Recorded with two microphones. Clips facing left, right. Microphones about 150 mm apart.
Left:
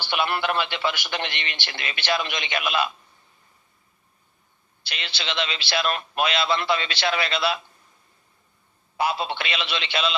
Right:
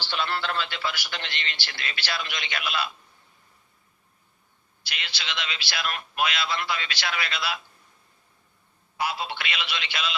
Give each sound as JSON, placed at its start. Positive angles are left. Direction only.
{"t": 0.0, "sound": "a man's voice", "side_deg": 15}
{"t": 4.8, "sound": "a man's voice", "side_deg": 30}
{"t": 9.0, "sound": "a man's voice", "side_deg": 30}